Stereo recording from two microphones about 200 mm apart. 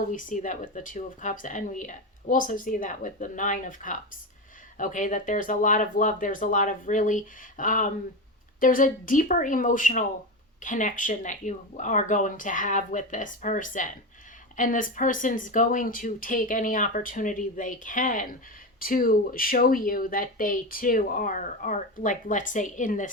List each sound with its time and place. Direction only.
0.1 s speech: 40° left (ahead or behind)